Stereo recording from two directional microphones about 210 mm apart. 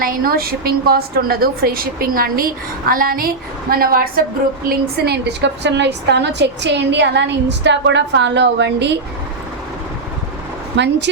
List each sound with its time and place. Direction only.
0.0 s a woman's voice: 45° right (ahead or behind)
10.8 s a woman's voice: 55° right (ahead or behind)